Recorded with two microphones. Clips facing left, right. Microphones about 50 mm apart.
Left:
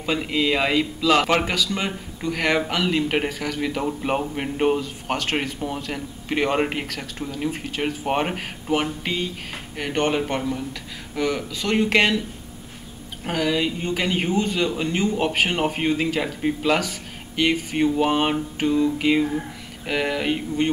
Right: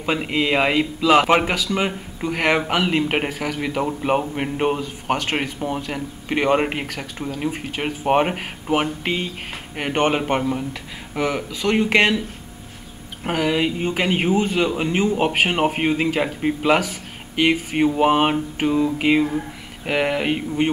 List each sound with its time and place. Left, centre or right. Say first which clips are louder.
0.0 s a man's voice: right 1 dB; centre
9.0 s a man's voice: right 2 dB; right; by 12.2 s centre
13.2 s a man's voice: right 2 dB; centre